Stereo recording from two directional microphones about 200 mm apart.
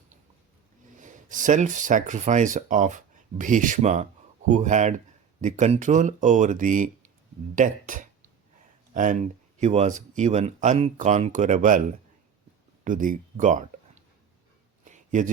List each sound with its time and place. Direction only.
0.9 s speech: 40° right (ahead or behind)
12.8 s speech: 40° right (ahead or behind)
14.8 s a sound: 40° right (ahead or behind)